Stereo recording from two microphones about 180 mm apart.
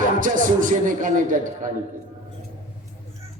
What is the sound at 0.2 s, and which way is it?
A man's voice, 45° right (ahead or behind).